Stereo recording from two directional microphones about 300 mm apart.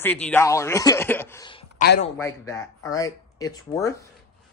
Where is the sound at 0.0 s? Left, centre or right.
Centre.